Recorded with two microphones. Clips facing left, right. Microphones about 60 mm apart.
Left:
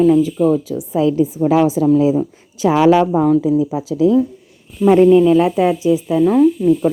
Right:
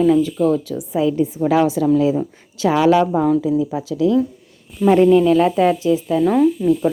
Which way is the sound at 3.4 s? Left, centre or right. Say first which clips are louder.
Left 3 dB; centre.